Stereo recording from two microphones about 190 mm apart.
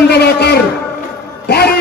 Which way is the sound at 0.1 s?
55° left (ahead or behind).